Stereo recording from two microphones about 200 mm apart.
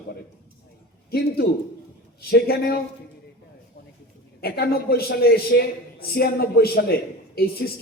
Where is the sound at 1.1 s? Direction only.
50° left (ahead or behind).